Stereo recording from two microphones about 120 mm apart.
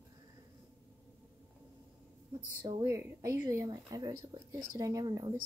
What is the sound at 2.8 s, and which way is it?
Speech, 25° right (ahead or behind).